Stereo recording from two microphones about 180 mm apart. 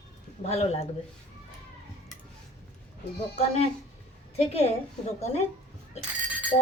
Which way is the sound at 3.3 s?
35° left (ahead or behind).